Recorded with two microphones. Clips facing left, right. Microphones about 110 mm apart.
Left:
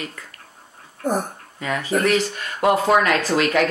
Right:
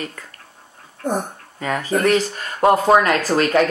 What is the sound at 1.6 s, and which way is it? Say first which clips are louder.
Speech: right 2 dB; 40° right (ahead or behind).